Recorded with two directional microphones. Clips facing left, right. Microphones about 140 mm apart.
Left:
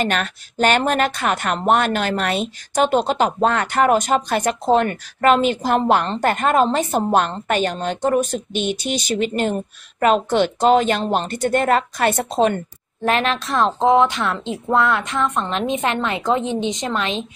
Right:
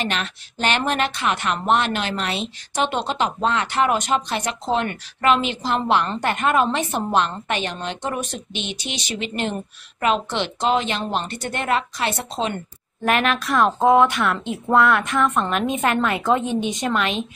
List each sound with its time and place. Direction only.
0.0 s a woman's voice: 45° left (ahead or behind)
13.0 s a woman's voice: 30° left (ahead or behind)